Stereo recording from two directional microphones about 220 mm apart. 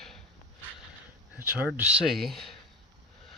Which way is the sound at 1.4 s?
10° right (ahead or behind).